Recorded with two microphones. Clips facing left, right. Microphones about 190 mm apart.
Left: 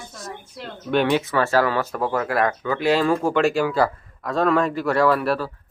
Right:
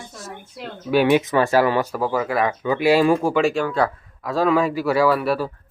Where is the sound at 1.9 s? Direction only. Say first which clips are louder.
Right 1 dB; centre (ahead or behind).